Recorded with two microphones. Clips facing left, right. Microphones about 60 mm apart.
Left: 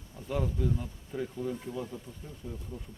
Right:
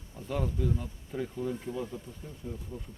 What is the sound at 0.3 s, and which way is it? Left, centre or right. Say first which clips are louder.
Speech: even; centre.